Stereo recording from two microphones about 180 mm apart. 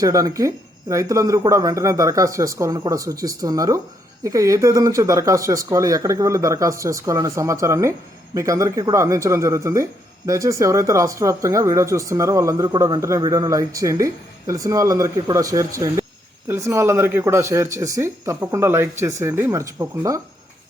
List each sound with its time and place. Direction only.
0.0 s speech: 20° right (ahead or behind)